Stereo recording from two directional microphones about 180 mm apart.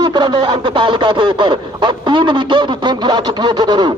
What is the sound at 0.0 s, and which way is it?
Speech, 25° right (ahead or behind).